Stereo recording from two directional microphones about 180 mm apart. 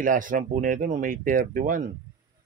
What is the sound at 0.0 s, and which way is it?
A man's voice, 50° right (ahead or behind).